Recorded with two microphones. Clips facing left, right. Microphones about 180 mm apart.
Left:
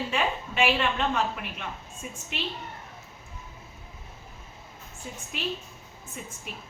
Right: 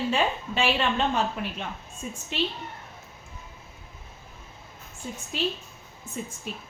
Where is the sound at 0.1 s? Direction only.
30° right (ahead or behind).